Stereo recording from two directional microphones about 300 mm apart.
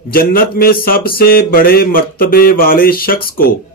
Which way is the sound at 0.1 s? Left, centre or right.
Left.